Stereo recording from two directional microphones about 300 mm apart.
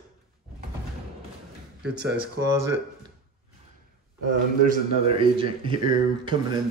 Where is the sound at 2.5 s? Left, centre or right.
Centre.